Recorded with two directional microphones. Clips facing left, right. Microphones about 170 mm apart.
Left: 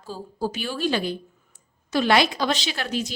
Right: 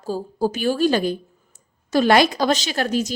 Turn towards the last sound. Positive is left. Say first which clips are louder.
# right 6 dB
turn(degrees=-45)  # may be behind; listen again after turning